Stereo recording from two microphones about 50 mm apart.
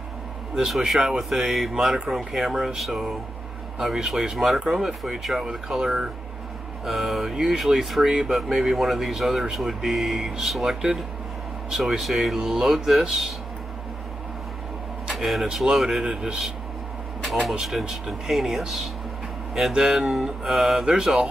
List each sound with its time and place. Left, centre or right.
0.7 s speech: centre
15.1 s speech: centre